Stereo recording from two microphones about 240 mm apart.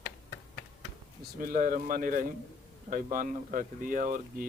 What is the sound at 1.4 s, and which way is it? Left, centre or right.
Speech, right.